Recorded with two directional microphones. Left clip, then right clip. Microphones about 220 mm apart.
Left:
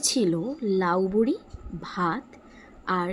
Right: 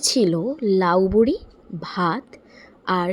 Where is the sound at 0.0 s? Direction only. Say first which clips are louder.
Right 5 dB; 15° right (ahead or behind).